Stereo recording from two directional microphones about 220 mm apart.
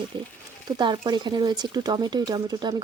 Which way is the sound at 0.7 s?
20° right (ahead or behind).